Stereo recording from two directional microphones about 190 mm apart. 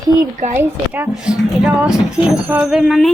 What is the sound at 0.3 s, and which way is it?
Speech, 40° right (ahead or behind).